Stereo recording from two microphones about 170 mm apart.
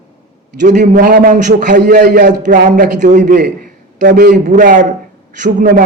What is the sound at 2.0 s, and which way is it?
Speech, 80° right.